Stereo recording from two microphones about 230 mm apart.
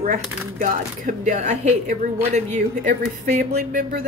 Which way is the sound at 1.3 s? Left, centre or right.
Right.